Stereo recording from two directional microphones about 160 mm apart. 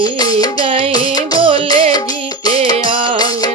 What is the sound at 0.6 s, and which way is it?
Music, 35° right (ahead or behind).